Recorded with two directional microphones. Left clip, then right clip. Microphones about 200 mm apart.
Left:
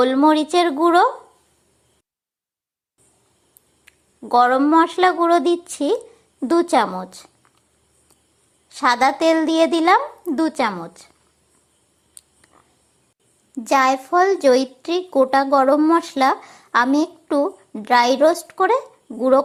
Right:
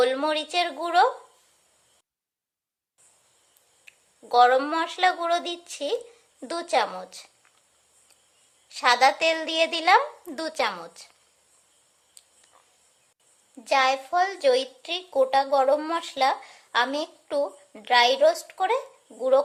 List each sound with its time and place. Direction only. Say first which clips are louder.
0.3 s a woman's voice: left 9 dB; 20° left (ahead or behind)
3.8 s a sound: left 7 dB; 15° left (ahead or behind)
4.8 s a woman's voice: left 8 dB; 15° left (ahead or behind)
8.7 s a woman's voice: left 3 dB; 15° left (ahead or behind)
10.7 s a woman's voice: left 6 dB; centre (ahead or behind)
13.7 s a child's voice: left 6 dB; 20° left (ahead or behind)